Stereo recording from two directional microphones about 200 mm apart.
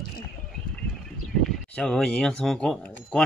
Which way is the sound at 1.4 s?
5° left (ahead or behind).